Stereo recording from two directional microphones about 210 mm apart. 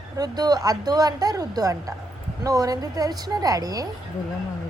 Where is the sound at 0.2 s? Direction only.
20° right (ahead or behind).